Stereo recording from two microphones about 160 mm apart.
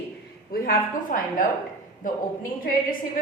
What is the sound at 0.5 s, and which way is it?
Speech, 65° left (ahead or behind).